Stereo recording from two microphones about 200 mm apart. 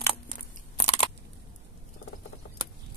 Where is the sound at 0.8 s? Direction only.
30° left (ahead or behind).